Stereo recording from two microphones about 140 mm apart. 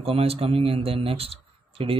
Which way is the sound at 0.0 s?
45° right (ahead or behind).